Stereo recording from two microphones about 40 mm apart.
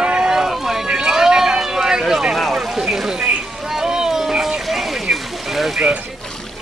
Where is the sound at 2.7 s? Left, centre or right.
Centre.